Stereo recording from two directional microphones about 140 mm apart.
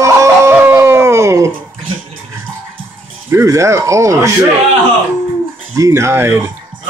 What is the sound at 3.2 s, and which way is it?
Speech, 20° right (ahead or behind).